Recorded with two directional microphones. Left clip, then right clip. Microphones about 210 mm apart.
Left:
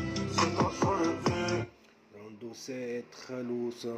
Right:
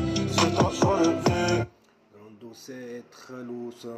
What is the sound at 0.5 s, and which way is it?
Music, 50° right (ahead or behind).